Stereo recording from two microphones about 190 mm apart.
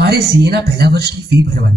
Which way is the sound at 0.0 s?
60° right (ahead or behind).